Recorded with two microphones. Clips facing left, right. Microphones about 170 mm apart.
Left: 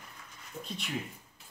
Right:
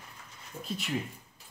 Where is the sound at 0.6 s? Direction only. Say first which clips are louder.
Right 6 dB; centre (ahead or behind).